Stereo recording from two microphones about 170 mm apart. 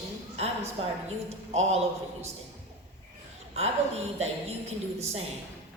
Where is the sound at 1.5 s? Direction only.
40° right (ahead or behind).